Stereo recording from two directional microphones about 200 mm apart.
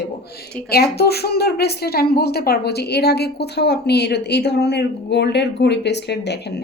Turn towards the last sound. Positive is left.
turn(degrees=60)  # may be behind; listen again after turning